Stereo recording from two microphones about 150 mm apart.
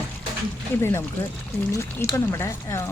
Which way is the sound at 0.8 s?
15° left (ahead or behind).